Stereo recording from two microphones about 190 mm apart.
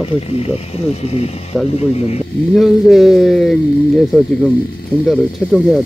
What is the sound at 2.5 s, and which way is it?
Speech, centre (ahead or behind).